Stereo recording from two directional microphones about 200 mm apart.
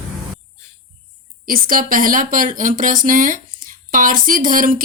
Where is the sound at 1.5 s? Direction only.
45° right (ahead or behind).